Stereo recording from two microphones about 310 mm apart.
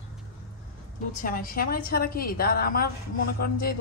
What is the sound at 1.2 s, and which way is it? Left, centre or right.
A woman's voice, left.